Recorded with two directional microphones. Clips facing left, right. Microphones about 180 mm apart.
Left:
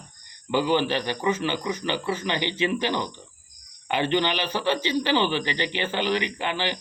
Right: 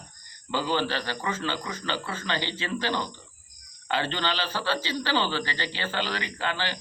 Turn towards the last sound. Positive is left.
turn(degrees=15)  # may be behind; listen again after turning